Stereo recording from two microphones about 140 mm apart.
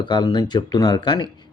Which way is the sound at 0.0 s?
30° left (ahead or behind).